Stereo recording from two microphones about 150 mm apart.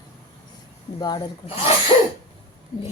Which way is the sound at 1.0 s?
30° left (ahead or behind).